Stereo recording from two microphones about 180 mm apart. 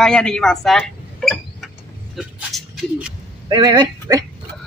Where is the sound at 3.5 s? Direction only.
25° right (ahead or behind).